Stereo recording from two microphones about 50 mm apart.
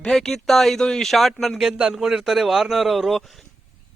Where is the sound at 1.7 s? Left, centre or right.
Centre.